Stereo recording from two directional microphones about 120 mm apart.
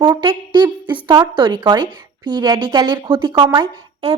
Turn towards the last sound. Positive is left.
turn(degrees=-40)  # may be behind; listen again after turning